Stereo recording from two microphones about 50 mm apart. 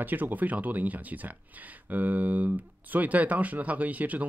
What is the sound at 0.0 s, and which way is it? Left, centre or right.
Speech, right.